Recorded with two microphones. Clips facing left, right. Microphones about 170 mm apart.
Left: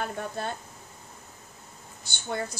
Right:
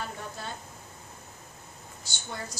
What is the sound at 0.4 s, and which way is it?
Speech, 60° left (ahead or behind).